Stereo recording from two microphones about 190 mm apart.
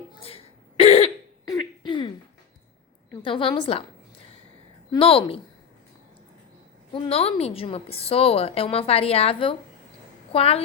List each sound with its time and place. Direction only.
0.1 s cough: 30° left (ahead or behind)
1.5 s a sound: 20° left (ahead or behind)
3.1 s a woman's voice: 25° left (ahead or behind)
4.9 s a woman's voice: 30° left (ahead or behind)
6.9 s a woman's voice: 30° left (ahead or behind)